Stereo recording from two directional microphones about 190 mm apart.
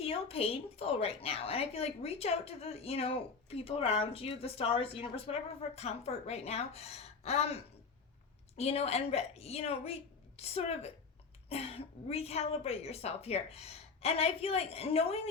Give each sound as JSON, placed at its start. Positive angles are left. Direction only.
{"t": 0.0, "sound": "a woman's voice", "side_deg": 30}